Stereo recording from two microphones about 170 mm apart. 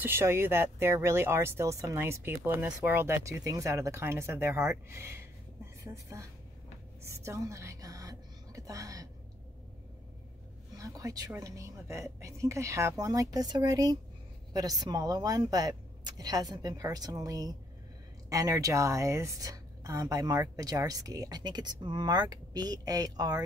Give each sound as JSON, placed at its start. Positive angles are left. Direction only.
{"t": 0.0, "sound": "speech", "side_deg": -15}
{"t": 7.1, "sound": "music", "side_deg": -15}
{"t": 10.8, "sound": "a woman's voice", "side_deg": -20}